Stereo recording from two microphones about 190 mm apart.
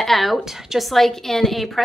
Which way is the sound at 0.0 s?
Centre (ahead or behind).